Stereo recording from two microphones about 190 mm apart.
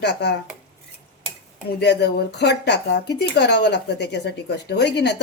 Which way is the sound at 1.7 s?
60° left (ahead or behind).